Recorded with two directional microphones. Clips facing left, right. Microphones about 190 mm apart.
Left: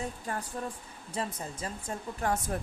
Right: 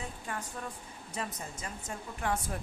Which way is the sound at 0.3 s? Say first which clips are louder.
Left 1 dB; 40° left (ahead or behind).